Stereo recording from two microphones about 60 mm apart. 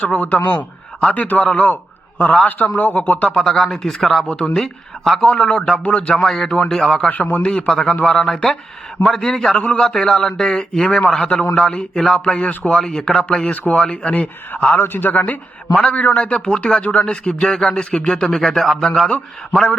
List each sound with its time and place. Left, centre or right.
0.2 s a man's voice: left
3.3 s speech: centre
4.3 s a man's voice: centre
6.2 s a man's voice: centre
7.1 s speech: left
7.4 s a man's voice: centre
12.7 s a man's voice: centre
14.8 s a man's voice: left
15.7 s a man's voice: centre